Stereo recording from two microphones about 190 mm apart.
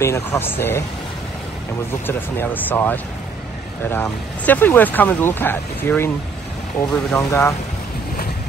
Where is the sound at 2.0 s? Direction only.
10° left (ahead or behind).